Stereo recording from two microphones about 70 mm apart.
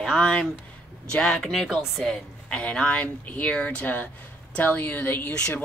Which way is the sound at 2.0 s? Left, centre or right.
Centre.